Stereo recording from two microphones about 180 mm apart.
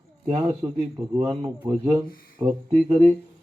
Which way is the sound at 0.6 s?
25° right (ahead or behind).